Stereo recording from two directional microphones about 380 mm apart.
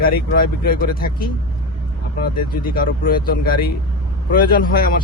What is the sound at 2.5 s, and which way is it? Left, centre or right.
Speech, left.